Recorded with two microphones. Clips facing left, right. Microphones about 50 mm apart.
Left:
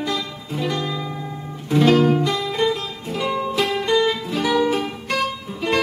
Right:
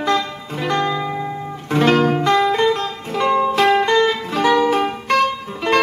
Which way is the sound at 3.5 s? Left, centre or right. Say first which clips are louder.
Right 3 dB; right.